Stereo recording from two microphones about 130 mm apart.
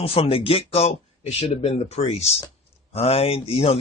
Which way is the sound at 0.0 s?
50° left (ahead or behind).